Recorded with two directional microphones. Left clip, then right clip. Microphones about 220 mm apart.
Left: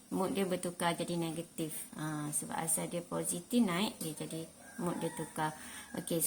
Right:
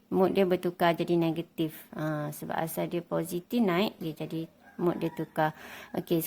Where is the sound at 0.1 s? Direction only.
45° right (ahead or behind).